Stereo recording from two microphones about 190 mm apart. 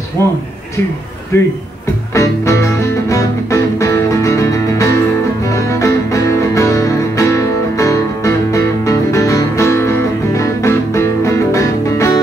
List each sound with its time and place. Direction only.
0.2 s speech: 15° left (ahead or behind)
2.1 s music: 15° left (ahead or behind)